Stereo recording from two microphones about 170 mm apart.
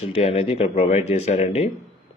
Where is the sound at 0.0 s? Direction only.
35° left (ahead or behind).